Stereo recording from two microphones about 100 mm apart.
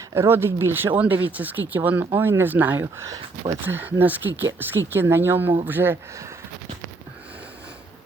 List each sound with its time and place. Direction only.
0.1 s speech: 25° right (ahead or behind)